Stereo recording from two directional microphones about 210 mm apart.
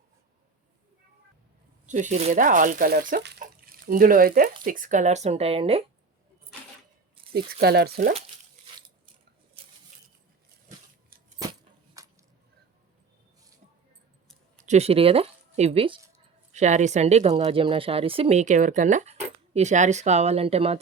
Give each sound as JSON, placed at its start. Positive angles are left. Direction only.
{"t": 1.9, "sound": "speech", "side_deg": -35}
{"t": 3.2, "sound": "speech", "side_deg": -55}
{"t": 3.4, "sound": "speech", "side_deg": -40}
{"t": 7.3, "sound": "speech", "side_deg": -50}
{"t": 12.0, "sound": "a sound", "side_deg": -15}
{"t": 14.6, "sound": "speech", "side_deg": -30}